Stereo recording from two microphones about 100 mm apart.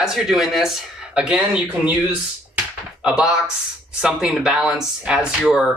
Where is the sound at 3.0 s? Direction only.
5° right (ahead or behind).